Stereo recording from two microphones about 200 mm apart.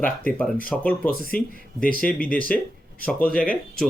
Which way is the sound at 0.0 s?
10° left (ahead or behind).